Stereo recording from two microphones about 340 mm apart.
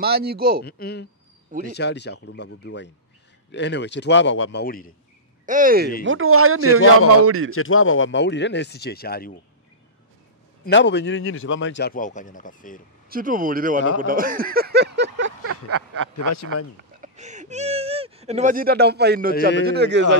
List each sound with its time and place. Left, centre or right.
0.0 s speech: right
0.7 s a man's voice: left
5.4 s speech: right
6.0 s speech: right
7.5 s a man's voice: left
10.6 s a man's voice: left
13.1 s speech: right
15.0 s a sound: right
16.3 s speech: left
17.0 s a sound: right
19.6 s speech: right